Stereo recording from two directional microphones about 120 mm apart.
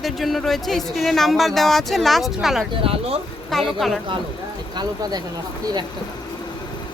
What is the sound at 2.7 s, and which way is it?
Speech, 50° right (ahead or behind).